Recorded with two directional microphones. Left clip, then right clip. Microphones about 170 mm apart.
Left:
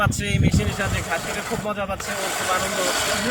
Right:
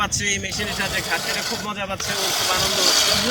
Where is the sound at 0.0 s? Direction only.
90° left.